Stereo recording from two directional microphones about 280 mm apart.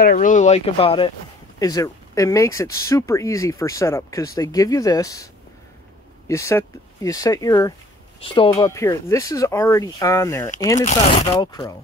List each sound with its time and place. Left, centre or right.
0.0 s speech: left; by 10.5 s centre
10.8 s speech: left